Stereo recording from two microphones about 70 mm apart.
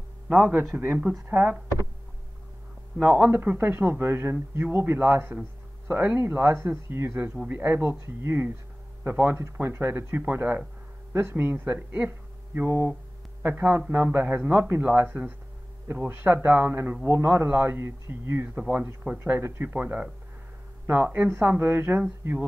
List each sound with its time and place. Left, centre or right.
0.3 s a man's voice: centre
3.0 s a man's voice: centre
3.3 s speech: right
18.6 s speech: centre